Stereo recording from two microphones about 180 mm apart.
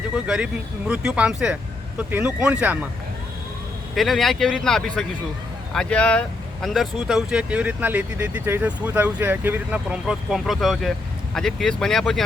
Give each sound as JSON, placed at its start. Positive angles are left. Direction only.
{"t": 0.3, "sound": "speech", "side_deg": -5}
{"t": 3.9, "sound": "speech", "side_deg": 0}